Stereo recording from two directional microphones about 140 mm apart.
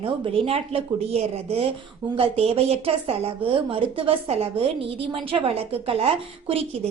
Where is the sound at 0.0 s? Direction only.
45° right (ahead or behind).